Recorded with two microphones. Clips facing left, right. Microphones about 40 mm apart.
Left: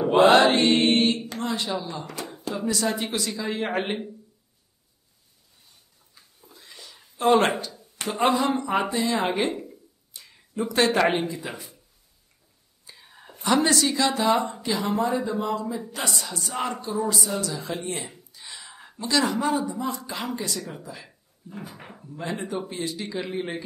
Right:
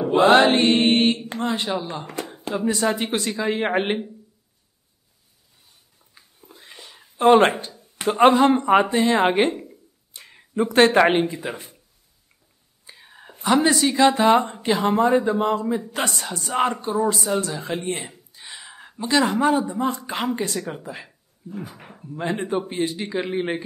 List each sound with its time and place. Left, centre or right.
0.5 s speech: right
6.2 s a sound: right
7.2 s speech: right
8.1 s speech: right
12.8 s whispering: centre
13.9 s speech: right
18.5 s a sound: centre
18.9 s speech: right
21.7 s speech: centre
22.0 s speech: right
22.3 s speech: right